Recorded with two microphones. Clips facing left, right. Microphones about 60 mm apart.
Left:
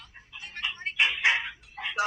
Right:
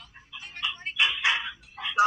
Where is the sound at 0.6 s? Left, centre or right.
Left.